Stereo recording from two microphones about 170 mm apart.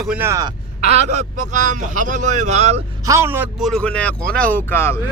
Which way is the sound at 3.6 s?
5° left (ahead or behind).